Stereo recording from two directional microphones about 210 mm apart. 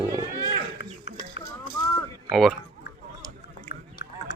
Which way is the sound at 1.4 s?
60° left (ahead or behind).